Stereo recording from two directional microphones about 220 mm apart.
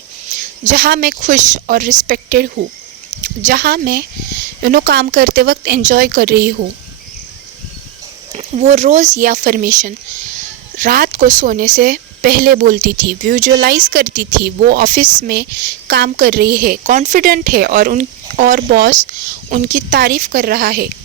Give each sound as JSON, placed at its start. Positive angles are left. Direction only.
{"t": 0.6, "sound": "speech", "side_deg": -40}
{"t": 8.3, "sound": "speech", "side_deg": -30}